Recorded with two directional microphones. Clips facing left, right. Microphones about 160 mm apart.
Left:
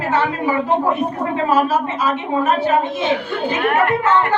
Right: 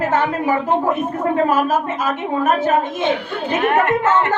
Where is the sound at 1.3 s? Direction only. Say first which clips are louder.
Even; 45° right (ahead or behind).